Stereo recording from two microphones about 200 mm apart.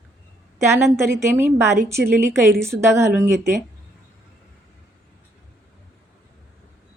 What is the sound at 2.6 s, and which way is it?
Speech, 15° right (ahead or behind).